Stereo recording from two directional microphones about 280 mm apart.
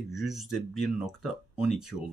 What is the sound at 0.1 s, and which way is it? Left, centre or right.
Speech, centre.